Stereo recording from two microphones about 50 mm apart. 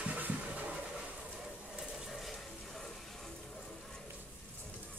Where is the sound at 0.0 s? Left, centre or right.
Right.